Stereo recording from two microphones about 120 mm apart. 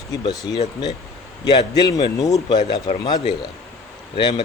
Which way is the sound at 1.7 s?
30° left (ahead or behind).